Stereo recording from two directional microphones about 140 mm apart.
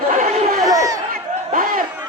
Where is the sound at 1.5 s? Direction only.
80° right.